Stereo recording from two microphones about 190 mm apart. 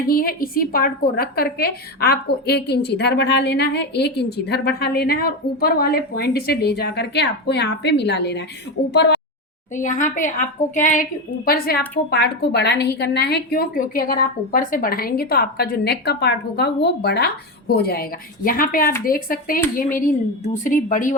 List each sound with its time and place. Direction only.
0.1 s a woman's voice: 50° left (ahead or behind)
9.7 s a woman's voice: 40° left (ahead or behind)
11.4 s a woman's voice: 50° left (ahead or behind)